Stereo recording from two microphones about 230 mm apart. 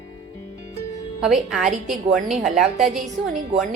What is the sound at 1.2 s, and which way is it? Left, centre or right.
A woman's voice, centre.